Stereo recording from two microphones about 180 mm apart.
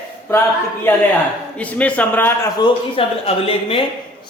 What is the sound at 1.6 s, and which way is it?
Speech, 10° left (ahead or behind).